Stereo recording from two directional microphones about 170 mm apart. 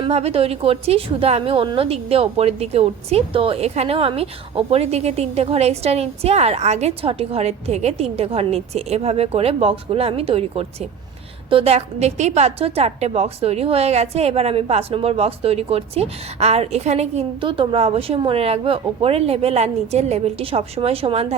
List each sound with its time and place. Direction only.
0.0 s a woman's voice: 35° right (ahead or behind)